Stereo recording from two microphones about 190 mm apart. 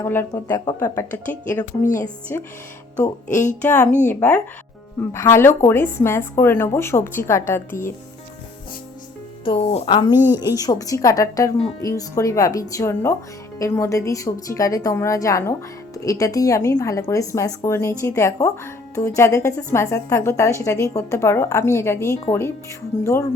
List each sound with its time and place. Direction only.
0.0 s speech: 15° left (ahead or behind)
3.2 s speech: 40° left (ahead or behind)
3.6 s speech: 10° left (ahead or behind)
9.4 s speech: 25° left (ahead or behind)
10.1 s a woman's voice: 10° right (ahead or behind)
10.3 s speech: 20° left (ahead or behind)